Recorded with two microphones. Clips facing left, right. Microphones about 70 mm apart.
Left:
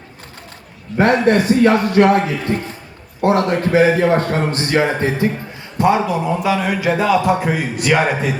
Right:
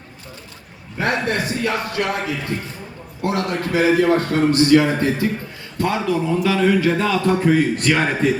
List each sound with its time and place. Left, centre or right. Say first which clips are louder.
1.1 s a man's voice: left 9 dB; left; by 8.3 s centre